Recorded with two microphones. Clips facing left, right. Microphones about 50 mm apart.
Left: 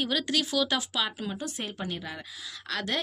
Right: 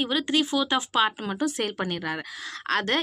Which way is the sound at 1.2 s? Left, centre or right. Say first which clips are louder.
Right 7 dB; right.